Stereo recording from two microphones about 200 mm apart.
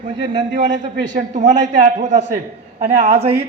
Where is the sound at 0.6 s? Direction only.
60° right (ahead or behind).